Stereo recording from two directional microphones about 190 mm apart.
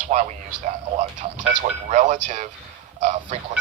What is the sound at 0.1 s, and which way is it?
Speech, 35° right (ahead or behind).